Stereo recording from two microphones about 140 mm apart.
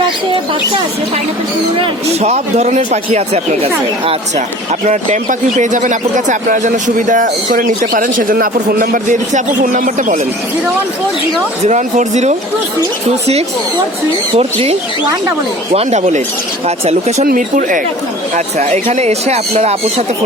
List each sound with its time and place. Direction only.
2.2 s speech: 50° right (ahead or behind)
4.9 s a man's voice: 60° right (ahead or behind)
11.6 s speech: 55° right (ahead or behind)
14.3 s speech: 45° right (ahead or behind)
17.2 s a man's voice: 70° right (ahead or behind)
18.3 s speech: 55° right (ahead or behind)